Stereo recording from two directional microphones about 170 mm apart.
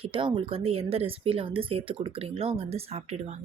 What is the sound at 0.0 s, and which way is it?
Speech, 30° right (ahead or behind).